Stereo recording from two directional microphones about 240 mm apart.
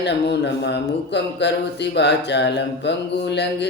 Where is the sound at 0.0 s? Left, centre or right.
Left.